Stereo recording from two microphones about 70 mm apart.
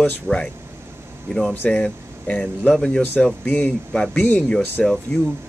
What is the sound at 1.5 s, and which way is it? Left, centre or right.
Speech, centre.